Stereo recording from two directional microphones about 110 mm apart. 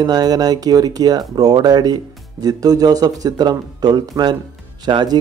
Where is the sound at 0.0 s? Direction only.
40° right (ahead or behind).